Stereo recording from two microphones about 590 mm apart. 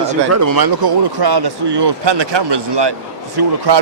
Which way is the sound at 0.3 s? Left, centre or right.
Right.